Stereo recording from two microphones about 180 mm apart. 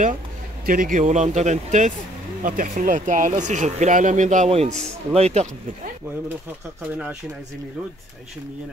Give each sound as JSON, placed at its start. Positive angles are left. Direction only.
{"t": 0.7, "sound": "speech", "side_deg": -50}